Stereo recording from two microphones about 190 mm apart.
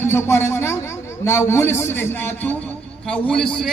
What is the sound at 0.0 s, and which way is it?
A man's voice, 15° left (ahead or behind).